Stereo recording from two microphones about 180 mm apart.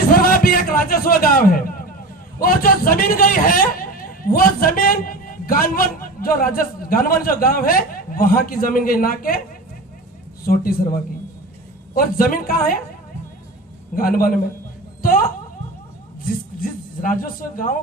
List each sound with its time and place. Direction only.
0.1 s a sound: 55° left (ahead or behind)
2.4 s a man's voice: 55° left (ahead or behind)
10.4 s a man's voice: 55° left (ahead or behind)
11.9 s a man's voice: 55° left (ahead or behind)
13.9 s a man's voice: 55° left (ahead or behind)
16.2 s speech: 50° left (ahead or behind)